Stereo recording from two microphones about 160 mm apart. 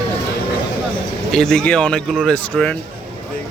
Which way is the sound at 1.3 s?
5° left (ahead or behind).